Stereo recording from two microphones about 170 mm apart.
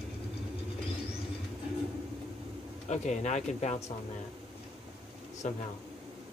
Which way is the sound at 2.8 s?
45° left (ahead or behind).